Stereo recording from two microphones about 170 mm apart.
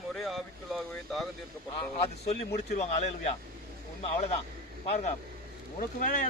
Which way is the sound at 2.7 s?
40° left (ahead or behind).